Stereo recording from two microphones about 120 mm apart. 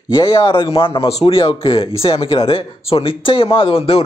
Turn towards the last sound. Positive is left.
turn(degrees=55)  # may be behind; listen again after turning